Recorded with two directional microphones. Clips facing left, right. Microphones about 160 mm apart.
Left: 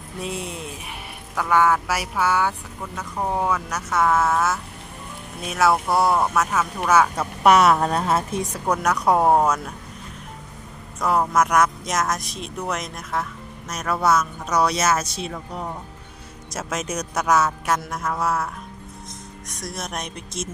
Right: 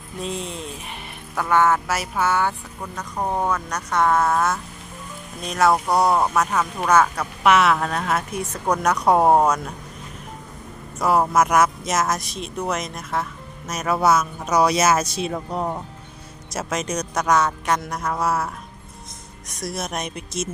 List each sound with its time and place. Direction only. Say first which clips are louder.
0.2 s speech: right 1 dB; 10° left (ahead or behind)
6.1 s speech: right 1 dB; 15° right (ahead or behind)
6.3 s speech: right 1 dB; centre (ahead or behind)
7.4 s a woman's voice: left 2 dB; 40° left (ahead or behind)
8.7 s speech: right 2 dB; centre (ahead or behind)
11.0 s speech: right 2 dB; 10° right (ahead or behind)
16.5 s speech: right 2 dB; centre (ahead or behind)
19.6 s speech: right 3 dB; 5° right (ahead or behind)